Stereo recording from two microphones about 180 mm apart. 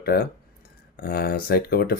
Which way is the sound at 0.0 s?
60° left (ahead or behind).